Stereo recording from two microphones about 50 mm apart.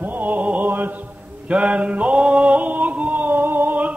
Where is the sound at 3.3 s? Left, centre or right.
Right.